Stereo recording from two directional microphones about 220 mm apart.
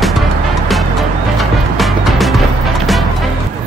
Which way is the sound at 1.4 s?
Centre (ahead or behind).